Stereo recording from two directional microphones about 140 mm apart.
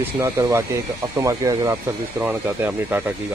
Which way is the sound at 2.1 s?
15° right (ahead or behind).